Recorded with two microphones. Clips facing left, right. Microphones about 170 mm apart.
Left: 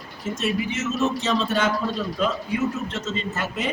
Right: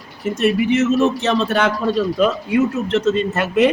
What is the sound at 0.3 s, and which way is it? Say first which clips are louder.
A man's voice: right 11 dB; 65° right (ahead or behind).